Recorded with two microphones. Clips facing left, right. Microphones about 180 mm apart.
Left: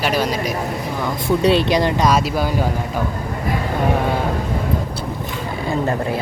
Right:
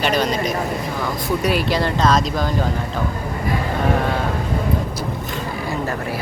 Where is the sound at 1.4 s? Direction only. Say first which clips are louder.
Left 5 dB; 25° left (ahead or behind); by 2.7 s 10° left (ahead or behind).